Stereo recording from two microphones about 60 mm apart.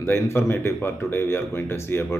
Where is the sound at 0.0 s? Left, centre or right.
Left.